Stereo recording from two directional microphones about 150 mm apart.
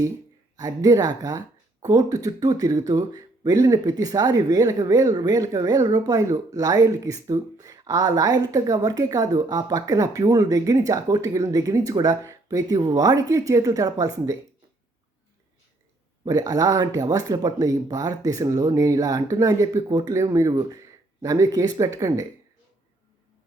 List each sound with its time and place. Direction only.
0.5 s speech: 25° right (ahead or behind)
16.2 s speech: 25° right (ahead or behind)